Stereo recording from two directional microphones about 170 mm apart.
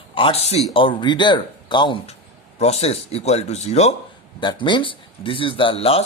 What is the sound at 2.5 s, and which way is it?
Speech, 40° left (ahead or behind).